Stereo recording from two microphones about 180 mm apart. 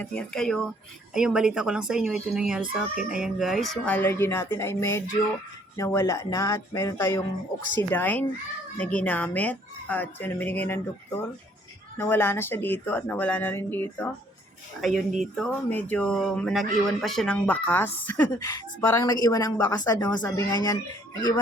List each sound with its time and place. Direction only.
0.0 s speech: 5° left (ahead or behind)
14.8 s speech: centre (ahead or behind)
18.2 s a woman's voice: 20° left (ahead or behind)